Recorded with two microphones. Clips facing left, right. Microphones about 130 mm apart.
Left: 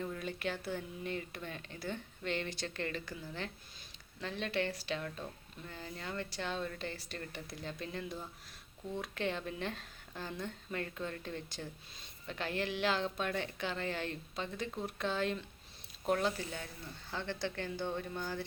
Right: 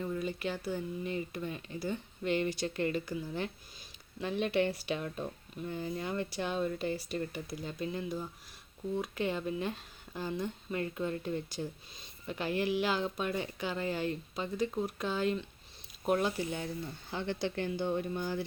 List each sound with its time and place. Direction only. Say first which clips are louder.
0.0 s speech: right 4 dB; 5° right (ahead or behind)
16.2 s speech: right 3 dB; 20° right (ahead or behind)